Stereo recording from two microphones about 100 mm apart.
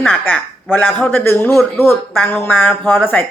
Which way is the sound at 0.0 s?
15° left (ahead or behind).